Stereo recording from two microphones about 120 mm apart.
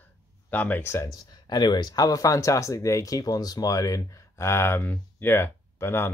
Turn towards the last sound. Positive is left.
turn(degrees=15)  # may be behind; listen again after turning